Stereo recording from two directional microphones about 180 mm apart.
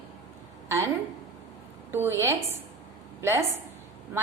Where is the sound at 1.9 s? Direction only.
15° right (ahead or behind).